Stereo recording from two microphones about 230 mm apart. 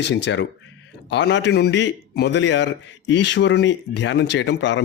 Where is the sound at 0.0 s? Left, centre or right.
Left.